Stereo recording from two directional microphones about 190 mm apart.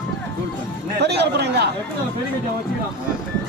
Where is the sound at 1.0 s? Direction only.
60° right (ahead or behind).